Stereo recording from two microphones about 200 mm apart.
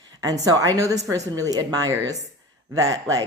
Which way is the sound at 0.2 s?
20° right (ahead or behind).